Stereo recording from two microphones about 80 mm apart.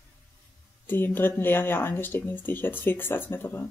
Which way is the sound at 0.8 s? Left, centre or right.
Left.